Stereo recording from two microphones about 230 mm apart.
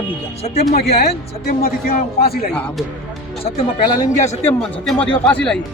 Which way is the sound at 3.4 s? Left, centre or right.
Left.